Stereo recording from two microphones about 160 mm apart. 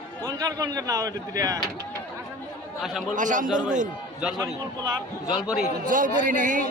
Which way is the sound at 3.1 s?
55° right (ahead or behind).